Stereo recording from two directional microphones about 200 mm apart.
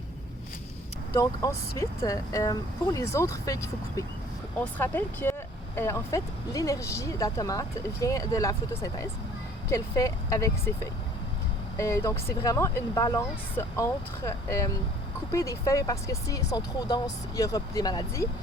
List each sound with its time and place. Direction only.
1.1 s speech: 15° left (ahead or behind)
11.8 s speech: 15° left (ahead or behind)